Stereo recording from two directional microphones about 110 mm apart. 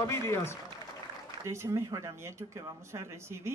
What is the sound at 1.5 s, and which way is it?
Speech, 25° right (ahead or behind).